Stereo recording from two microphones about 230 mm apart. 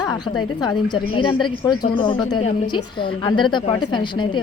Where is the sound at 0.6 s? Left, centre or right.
Centre.